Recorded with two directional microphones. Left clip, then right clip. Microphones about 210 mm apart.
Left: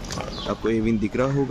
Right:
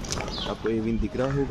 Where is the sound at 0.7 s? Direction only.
40° left (ahead or behind).